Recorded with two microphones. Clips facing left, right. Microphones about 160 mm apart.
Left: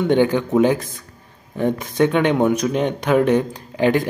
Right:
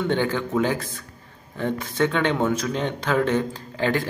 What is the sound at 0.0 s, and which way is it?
Speech, 15° left (ahead or behind).